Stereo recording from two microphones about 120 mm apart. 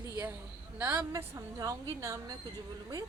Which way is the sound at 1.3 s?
25° right (ahead or behind).